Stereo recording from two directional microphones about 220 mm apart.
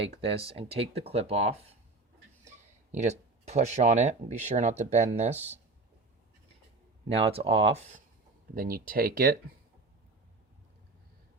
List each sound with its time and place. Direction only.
0.2 s speech: 25° right (ahead or behind)
2.9 s speech: 30° right (ahead or behind)
7.1 s speech: 25° right (ahead or behind)
8.5 s speech: 40° right (ahead or behind)